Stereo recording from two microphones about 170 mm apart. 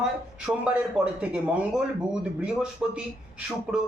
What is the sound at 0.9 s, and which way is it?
Speech, 5° right (ahead or behind).